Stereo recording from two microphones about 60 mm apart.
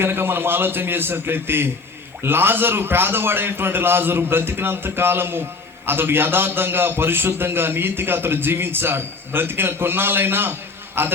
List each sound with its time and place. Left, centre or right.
0.0 s a man's voice: right